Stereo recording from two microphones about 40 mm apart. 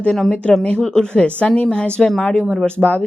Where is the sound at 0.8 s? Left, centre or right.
Left.